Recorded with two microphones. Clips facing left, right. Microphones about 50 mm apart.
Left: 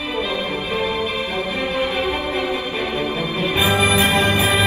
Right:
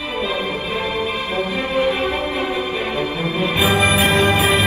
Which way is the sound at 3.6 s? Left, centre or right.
Right.